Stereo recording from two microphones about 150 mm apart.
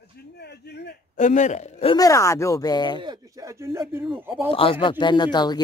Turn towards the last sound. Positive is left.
turn(degrees=30)  # may be behind; listen again after turning